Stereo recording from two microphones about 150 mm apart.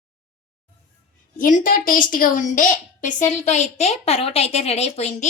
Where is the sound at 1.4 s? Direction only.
65° left (ahead or behind).